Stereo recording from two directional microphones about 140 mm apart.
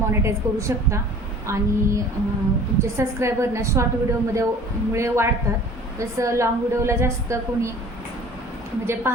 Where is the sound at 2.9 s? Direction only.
20° right (ahead or behind).